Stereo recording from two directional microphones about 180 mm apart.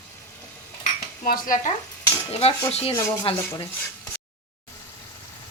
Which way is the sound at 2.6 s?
35° left (ahead or behind).